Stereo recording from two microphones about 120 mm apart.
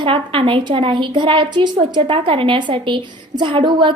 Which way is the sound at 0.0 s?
50° right (ahead or behind).